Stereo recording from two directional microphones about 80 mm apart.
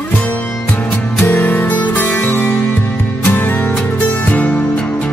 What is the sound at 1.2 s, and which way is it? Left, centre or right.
Music, centre.